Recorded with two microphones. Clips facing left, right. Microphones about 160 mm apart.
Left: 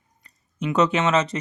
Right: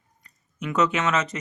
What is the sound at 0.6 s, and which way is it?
Speech, 30° left (ahead or behind).